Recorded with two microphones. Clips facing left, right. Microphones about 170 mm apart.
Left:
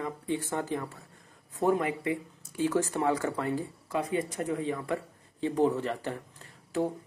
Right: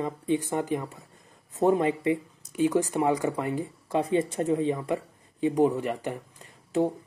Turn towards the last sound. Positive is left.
turn(degrees=-20)  # may be behind; listen again after turning